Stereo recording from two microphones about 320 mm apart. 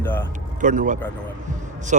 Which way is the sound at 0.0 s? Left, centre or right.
Centre.